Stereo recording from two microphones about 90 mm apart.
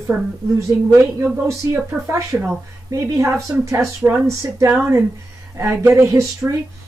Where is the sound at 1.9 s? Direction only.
5° right (ahead or behind).